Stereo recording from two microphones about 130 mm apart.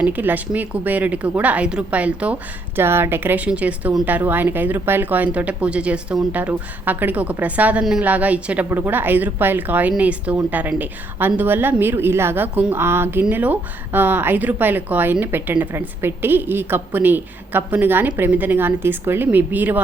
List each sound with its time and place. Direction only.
0.0 s a woman's voice: 15° right (ahead or behind)